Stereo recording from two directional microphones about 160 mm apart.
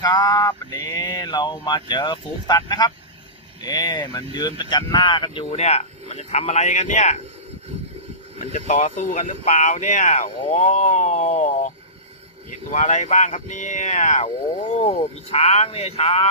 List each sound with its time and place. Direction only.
0.0 s speech: 25° left (ahead or behind); by 7.2 s 50° left (ahead or behind)
8.5 s speech: 50° left (ahead or behind)
12.7 s speech: 50° left (ahead or behind)